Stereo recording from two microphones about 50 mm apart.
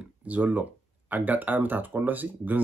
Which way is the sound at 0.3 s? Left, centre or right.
Right.